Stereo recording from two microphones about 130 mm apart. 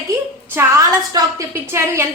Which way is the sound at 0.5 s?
25° right (ahead or behind).